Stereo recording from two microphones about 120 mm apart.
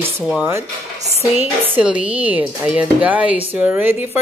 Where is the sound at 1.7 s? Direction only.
10° right (ahead or behind).